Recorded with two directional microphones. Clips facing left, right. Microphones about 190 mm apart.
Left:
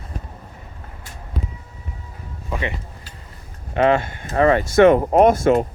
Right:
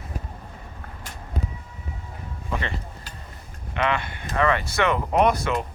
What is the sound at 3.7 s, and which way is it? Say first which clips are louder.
Speech: left 8 dB; 40° left (ahead or behind).